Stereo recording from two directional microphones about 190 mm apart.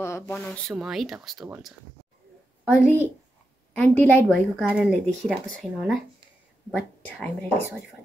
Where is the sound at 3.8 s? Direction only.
10° left (ahead or behind).